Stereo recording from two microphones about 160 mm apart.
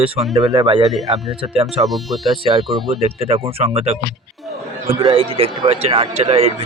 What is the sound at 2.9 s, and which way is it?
Speech, 40° right (ahead or behind).